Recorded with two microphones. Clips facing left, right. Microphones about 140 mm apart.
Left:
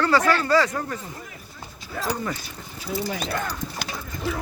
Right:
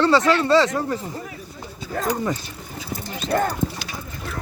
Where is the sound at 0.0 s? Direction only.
25° right (ahead or behind).